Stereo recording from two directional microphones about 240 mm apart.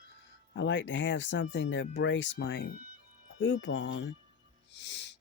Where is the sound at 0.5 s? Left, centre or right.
Left.